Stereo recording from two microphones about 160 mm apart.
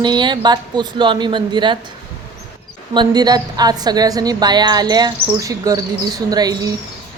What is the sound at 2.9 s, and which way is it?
A woman's voice, 25° right (ahead or behind).